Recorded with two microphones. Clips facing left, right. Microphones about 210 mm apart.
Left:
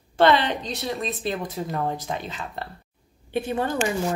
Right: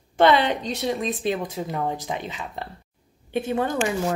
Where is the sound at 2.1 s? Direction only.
15° right (ahead or behind).